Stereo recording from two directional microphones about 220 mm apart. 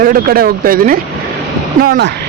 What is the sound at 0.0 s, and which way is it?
Speech, 40° right (ahead or behind).